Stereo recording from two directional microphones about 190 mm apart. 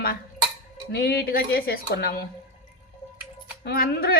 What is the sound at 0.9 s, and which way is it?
Speech, 55° left (ahead or behind).